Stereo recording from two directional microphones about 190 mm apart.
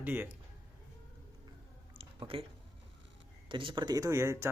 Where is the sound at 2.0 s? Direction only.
30° right (ahead or behind).